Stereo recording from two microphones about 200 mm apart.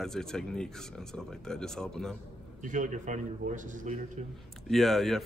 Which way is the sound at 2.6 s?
40° right (ahead or behind).